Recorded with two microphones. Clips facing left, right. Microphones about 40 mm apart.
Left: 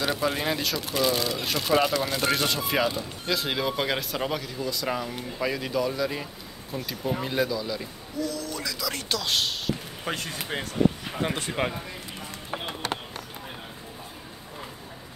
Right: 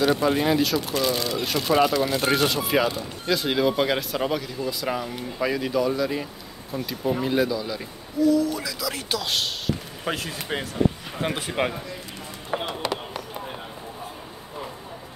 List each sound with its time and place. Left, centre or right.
0.0 s speech: centre